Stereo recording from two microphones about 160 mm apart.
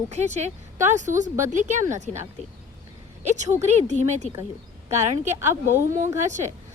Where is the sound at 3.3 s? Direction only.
45° right (ahead or behind).